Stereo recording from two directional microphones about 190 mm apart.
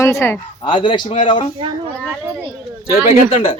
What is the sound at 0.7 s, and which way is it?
Speech, 25° left (ahead or behind).